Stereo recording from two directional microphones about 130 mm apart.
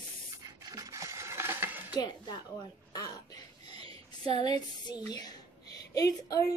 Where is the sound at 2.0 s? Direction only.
35° left (ahead or behind).